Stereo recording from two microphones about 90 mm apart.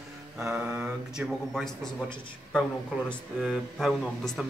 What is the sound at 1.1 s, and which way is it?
Speech, 5° left (ahead or behind).